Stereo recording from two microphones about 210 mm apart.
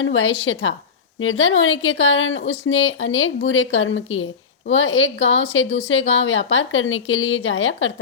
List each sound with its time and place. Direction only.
0.0 s a woman's voice: 65° left (ahead or behind)